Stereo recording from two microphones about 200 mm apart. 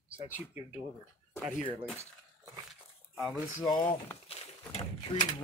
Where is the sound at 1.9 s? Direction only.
15° right (ahead or behind).